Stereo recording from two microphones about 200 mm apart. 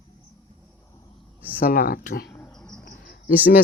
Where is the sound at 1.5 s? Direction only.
45° left (ahead or behind).